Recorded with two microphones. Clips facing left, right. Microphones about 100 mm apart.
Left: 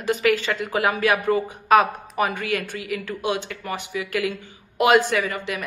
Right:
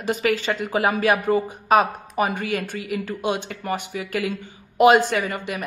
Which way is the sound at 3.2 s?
45° right (ahead or behind).